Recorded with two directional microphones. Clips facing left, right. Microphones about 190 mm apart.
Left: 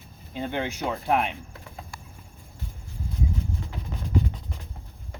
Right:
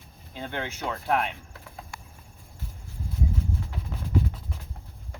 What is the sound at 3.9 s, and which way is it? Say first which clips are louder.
Music: left 1 dB; 5° right (ahead or behind).